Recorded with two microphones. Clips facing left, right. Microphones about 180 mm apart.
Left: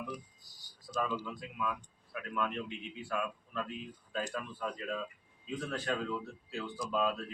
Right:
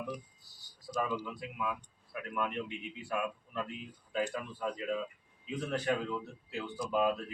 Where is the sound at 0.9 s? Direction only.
10° right (ahead or behind).